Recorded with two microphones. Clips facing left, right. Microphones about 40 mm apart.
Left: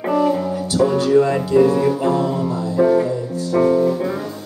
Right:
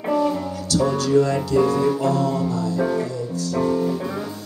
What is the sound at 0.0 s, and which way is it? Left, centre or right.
Music, centre.